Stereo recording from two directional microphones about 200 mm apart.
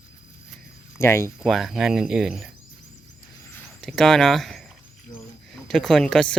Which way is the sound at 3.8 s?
Centre (ahead or behind).